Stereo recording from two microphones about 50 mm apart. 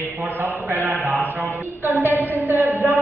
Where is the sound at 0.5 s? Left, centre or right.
Right.